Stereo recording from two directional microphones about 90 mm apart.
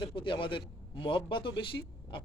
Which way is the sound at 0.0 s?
70° left (ahead or behind).